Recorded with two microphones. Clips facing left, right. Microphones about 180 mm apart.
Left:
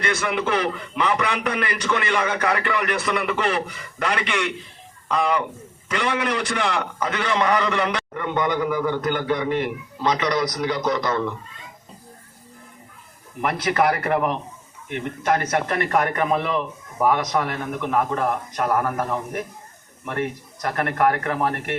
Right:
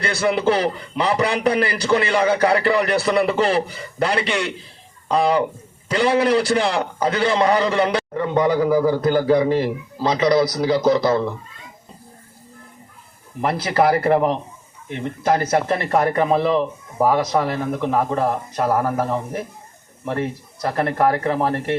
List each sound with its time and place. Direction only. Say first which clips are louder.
0.0 s a man's voice: right 5 dB; 35° right (ahead or behind)
13.4 s a man's voice: right 3 dB; 30° right (ahead or behind)